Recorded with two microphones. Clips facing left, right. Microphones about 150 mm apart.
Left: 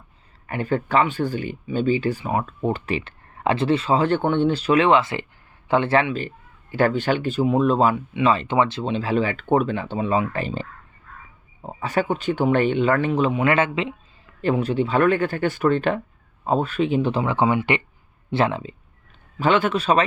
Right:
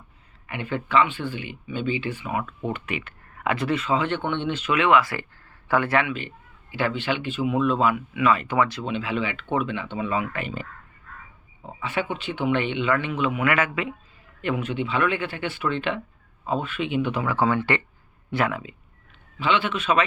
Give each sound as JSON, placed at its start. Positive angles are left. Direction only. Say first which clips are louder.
{"t": 0.4, "sound": "a man's voice", "louder": "left 6 dB", "side_deg": 40}
{"t": 18.3, "sound": "speech", "louder": "left 4 dB", "side_deg": 25}
{"t": 19.4, "sound": "a man's voice", "louder": "left 5 dB", "side_deg": 45}